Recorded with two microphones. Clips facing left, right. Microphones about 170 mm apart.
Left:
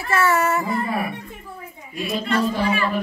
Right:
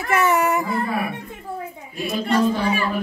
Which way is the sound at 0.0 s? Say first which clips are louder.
Right 1 dB; 20° right (ahead or behind).